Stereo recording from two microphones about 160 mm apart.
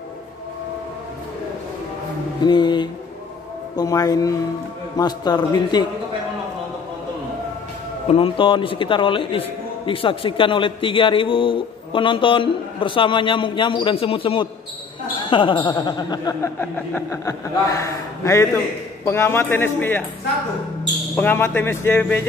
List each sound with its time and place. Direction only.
2.4 s a man's voice: 30° left (ahead or behind)
8.1 s a man's voice: 35° left (ahead or behind)
16.5 s a man's voice: 15° left (ahead or behind)
21.2 s speech: 10° left (ahead or behind)